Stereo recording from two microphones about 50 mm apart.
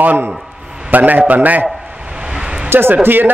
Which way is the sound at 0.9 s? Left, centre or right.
Right.